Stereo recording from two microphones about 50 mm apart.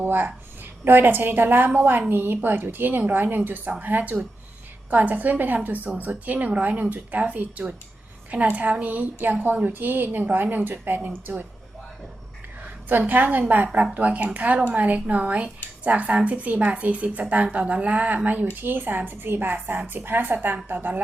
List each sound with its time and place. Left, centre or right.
0.0 s a woman's voice: right
12.9 s a woman's voice: right
18.5 s a woman's voice: right